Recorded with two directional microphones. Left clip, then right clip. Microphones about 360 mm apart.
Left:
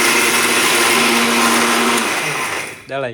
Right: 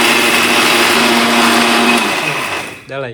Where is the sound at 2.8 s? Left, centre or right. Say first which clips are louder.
Even; centre.